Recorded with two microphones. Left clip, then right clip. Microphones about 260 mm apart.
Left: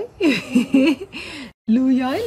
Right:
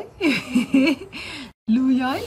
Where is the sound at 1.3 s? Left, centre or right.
Centre.